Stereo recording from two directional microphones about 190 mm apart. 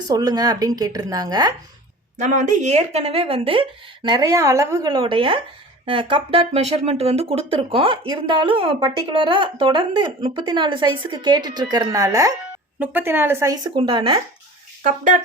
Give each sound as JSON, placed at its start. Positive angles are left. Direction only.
{"t": 0.1, "sound": "speech", "side_deg": -20}
{"t": 2.1, "sound": "speech", "side_deg": -40}
{"t": 14.8, "sound": "speech", "side_deg": -40}